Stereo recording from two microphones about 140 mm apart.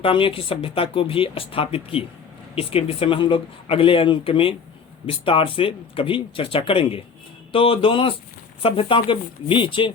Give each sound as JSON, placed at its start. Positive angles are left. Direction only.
{"t": 0.0, "sound": "speech", "side_deg": 40}